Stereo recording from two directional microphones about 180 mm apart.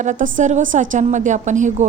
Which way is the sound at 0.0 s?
40° right (ahead or behind).